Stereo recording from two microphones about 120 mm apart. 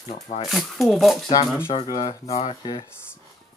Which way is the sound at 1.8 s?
35° left (ahead or behind).